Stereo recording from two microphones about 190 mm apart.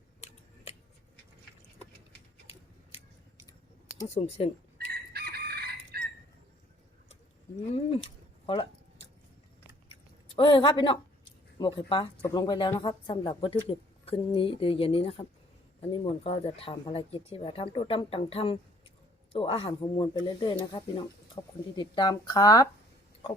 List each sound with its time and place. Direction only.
0.2 s scissors: 35° left (ahead or behind)
4.1 s speech: 30° left (ahead or behind)
4.9 s crowing: 55° right (ahead or behind)
7.7 s a sound: 30° left (ahead or behind)
10.3 s speech: 25° left (ahead or behind)